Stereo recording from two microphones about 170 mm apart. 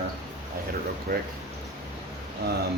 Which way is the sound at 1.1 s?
60° right (ahead or behind).